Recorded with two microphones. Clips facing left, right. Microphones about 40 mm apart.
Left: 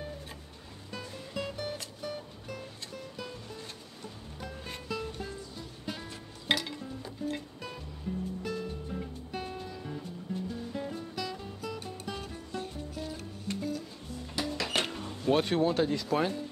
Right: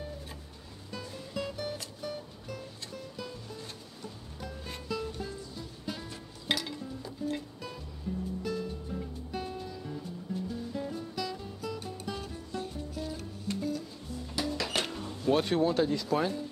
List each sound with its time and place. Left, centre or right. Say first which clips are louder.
0.9 s music: even; left